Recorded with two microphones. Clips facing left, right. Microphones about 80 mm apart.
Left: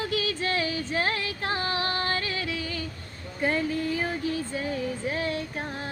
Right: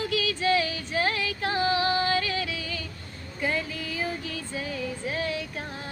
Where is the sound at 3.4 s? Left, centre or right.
Left.